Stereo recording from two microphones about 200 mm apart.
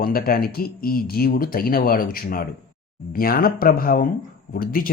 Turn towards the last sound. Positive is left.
turn(degrees=45)  # may be behind; listen again after turning